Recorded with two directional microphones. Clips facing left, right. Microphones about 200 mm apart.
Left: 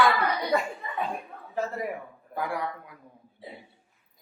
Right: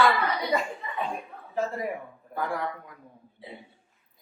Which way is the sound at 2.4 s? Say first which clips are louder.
Even; 10° left (ahead or behind).